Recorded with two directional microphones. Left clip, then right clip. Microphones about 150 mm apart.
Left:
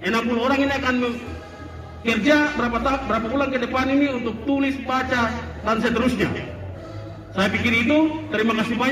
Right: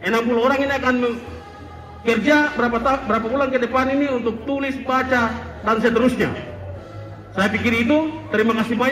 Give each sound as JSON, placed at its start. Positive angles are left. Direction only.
{"t": 0.0, "sound": "a man's voice", "side_deg": -45}
{"t": 7.3, "sound": "a man's voice", "side_deg": -45}